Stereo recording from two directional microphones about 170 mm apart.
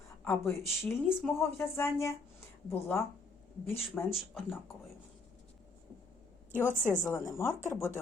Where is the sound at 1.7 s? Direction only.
15° left (ahead or behind).